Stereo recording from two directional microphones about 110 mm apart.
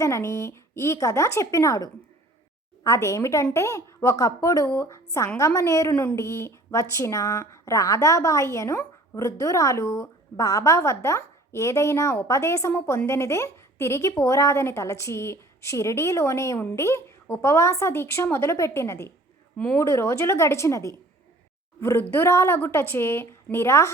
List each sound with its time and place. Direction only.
0.0 s speech: 25° left (ahead or behind)
19.5 s speech: 10° left (ahead or behind)
19.8 s speech: 25° left (ahead or behind)